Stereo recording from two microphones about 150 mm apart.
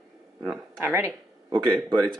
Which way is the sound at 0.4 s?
15° right (ahead or behind).